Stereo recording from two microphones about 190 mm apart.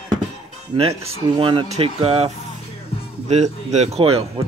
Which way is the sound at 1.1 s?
25° right (ahead or behind).